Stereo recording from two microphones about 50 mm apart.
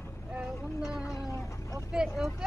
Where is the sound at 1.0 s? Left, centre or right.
Left.